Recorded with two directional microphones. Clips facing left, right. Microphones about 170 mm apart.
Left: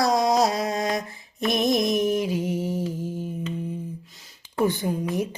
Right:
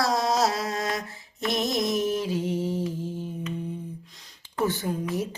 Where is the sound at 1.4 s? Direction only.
15° left (ahead or behind).